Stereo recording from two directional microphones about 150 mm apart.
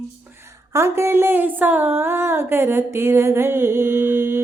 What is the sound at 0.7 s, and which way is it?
Music, 15° right (ahead or behind).